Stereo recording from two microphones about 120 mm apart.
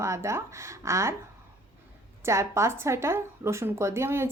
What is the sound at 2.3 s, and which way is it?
A woman's voice, 25° right (ahead or behind).